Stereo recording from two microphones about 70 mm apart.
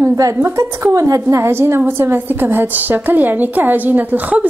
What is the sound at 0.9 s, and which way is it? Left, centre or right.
Speech, right.